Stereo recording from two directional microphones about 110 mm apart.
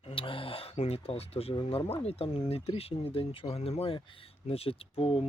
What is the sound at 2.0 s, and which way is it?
Speech, 65° left (ahead or behind).